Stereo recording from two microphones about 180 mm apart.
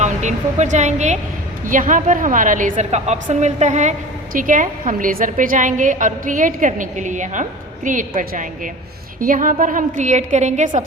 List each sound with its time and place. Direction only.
0.0 s a woman's voice: 40° right (ahead or behind)